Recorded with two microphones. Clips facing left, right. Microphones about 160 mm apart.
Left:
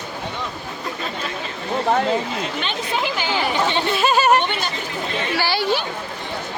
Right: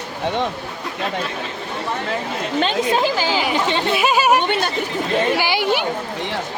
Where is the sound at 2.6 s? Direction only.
35° right (ahead or behind).